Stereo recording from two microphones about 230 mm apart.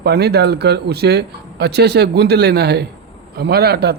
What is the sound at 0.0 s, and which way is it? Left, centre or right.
Speech, right.